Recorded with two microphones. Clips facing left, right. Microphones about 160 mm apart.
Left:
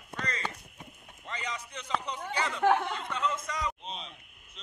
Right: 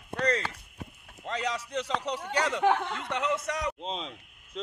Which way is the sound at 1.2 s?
90° right.